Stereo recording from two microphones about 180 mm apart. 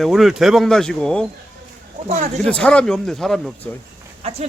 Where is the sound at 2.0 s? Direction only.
40° right (ahead or behind).